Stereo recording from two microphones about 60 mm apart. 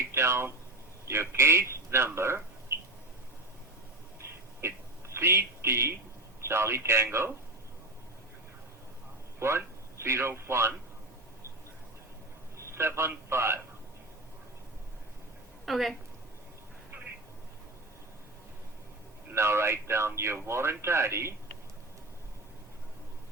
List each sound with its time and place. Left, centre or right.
0.1 s a sound: right
1.0 s speech: right
4.6 s speech: right
9.4 s speech: right
12.5 s a man's voice: right
15.6 s a woman's voice: centre
19.3 s speech: right